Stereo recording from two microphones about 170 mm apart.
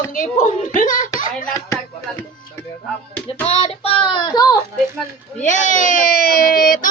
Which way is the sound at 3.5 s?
35° left (ahead or behind).